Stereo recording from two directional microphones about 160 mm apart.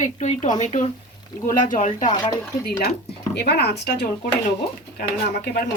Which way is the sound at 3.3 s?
90° left.